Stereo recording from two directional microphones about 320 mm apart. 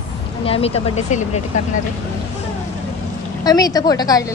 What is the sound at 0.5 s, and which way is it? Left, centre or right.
Speech, centre.